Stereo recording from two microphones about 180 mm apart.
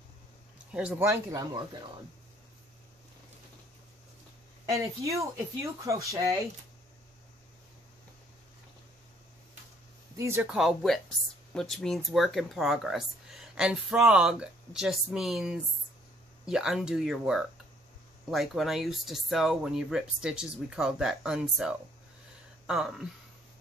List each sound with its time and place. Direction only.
0.7 s speech: 10° right (ahead or behind)
4.6 s speech: 15° right (ahead or behind)
10.1 s speech: 15° right (ahead or behind)